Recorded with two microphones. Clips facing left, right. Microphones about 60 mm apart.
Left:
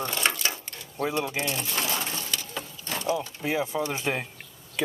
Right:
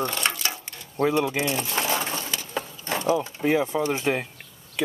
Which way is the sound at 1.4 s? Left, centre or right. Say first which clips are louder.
Right 4 dB; right.